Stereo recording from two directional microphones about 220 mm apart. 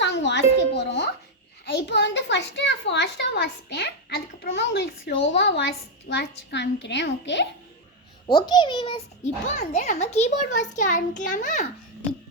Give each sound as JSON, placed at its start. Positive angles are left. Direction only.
{"t": 0.0, "sound": "music", "side_deg": 55}
{"t": 1.7, "sound": "a child's voice", "side_deg": 50}
{"t": 8.3, "sound": "a child's voice", "side_deg": 20}
{"t": 9.6, "sound": "a child's voice", "side_deg": 30}